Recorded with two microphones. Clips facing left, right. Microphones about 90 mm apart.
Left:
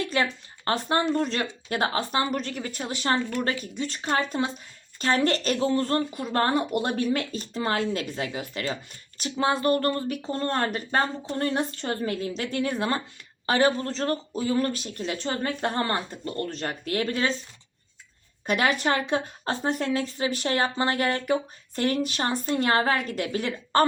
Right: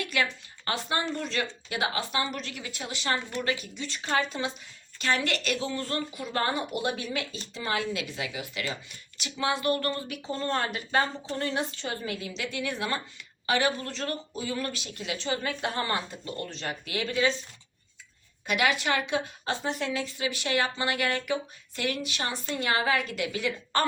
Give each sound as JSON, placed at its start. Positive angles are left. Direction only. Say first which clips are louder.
{"t": 0.0, "sound": "a woman's voice", "louder": "left 3 dB", "side_deg": 35}
{"t": 18.4, "sound": "a woman's voice", "louder": "left 3 dB", "side_deg": 40}